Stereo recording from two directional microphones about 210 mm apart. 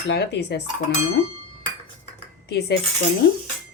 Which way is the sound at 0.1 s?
55° left (ahead or behind).